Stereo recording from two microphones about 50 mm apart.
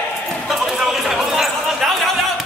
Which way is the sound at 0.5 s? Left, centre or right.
Centre.